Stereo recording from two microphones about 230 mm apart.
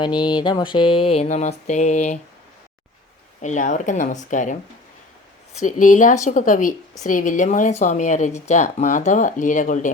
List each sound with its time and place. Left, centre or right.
0.0 s a sound: centre
3.4 s speech: left
5.6 s speech: left